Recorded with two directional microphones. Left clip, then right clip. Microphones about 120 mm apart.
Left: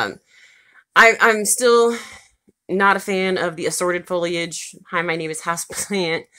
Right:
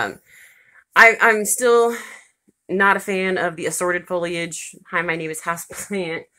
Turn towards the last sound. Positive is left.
turn(degrees=65)  # may be behind; listen again after turning